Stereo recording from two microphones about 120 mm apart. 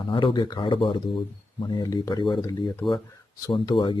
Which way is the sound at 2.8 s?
Centre (ahead or behind).